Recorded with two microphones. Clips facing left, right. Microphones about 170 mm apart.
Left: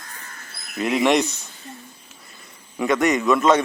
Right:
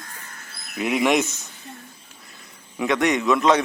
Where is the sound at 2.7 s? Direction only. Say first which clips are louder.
Left 1 dB; centre (ahead or behind).